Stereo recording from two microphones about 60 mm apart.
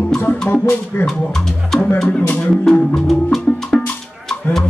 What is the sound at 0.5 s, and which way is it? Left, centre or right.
Speech, left.